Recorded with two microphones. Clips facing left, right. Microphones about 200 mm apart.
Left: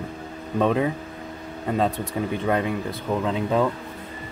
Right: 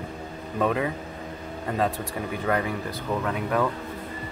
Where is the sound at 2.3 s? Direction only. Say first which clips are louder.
Left 2 dB; 20° left (ahead or behind).